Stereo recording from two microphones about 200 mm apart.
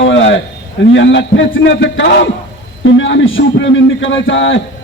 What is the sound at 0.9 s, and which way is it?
A man's voice, 65° left (ahead or behind).